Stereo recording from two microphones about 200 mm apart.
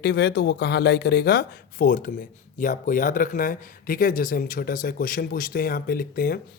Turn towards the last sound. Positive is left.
turn(degrees=50)  # may be behind; listen again after turning